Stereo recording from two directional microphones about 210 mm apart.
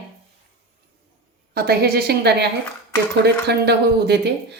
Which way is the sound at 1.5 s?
50° right (ahead or behind).